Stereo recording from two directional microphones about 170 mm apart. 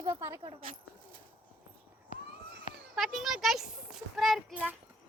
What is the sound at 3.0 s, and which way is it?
A child's voice, centre (ahead or behind).